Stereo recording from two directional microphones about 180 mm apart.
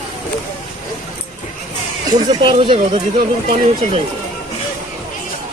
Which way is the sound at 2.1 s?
25° right (ahead or behind).